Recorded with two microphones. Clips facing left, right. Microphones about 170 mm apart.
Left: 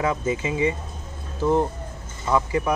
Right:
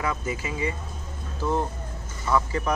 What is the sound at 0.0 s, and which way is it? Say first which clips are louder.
Speech: left 5 dB; 25° left (ahead or behind).